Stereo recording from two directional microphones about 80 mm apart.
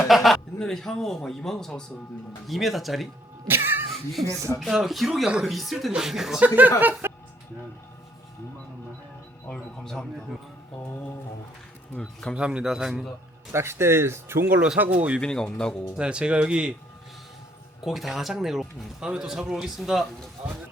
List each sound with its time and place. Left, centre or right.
0.1 s speech: centre
3.4 s a sound: right
4.3 s speech: right
4.6 s speech: centre
6.4 s speech: right
9.5 s speech: centre
12.4 s speech: centre
13.5 s speech: right
14.8 s speech: centre
15.2 s speech: centre
16.0 s speech: centre
17.8 s speech: centre